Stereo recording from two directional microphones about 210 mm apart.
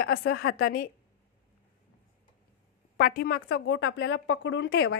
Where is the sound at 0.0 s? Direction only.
50° left (ahead or behind).